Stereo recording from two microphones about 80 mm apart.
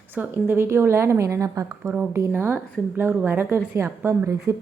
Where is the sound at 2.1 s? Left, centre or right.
Right.